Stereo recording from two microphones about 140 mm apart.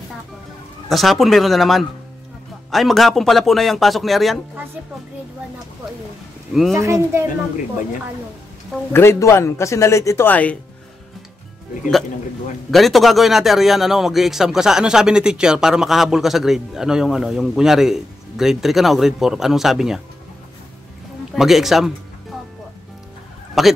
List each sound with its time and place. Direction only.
0.8 s speech: centre (ahead or behind)
6.7 s speech: 20° right (ahead or behind)
8.9 s speech: 20° left (ahead or behind)
12.7 s speech: centre (ahead or behind)
21.3 s speech: centre (ahead or behind)
23.6 s speech: centre (ahead or behind)